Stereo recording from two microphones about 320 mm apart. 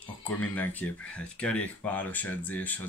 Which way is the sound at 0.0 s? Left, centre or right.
Centre.